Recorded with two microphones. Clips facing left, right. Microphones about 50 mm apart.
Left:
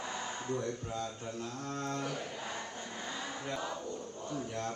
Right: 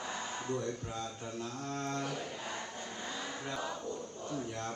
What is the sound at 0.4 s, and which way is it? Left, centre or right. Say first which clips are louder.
Speech: even; left.